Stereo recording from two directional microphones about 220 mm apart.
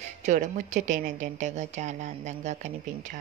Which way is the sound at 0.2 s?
35° right (ahead or behind).